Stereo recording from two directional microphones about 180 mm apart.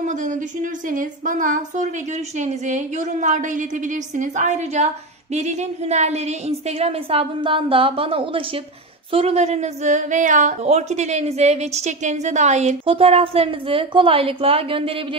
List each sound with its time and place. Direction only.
0.0 s a woman's voice: 45° right (ahead or behind)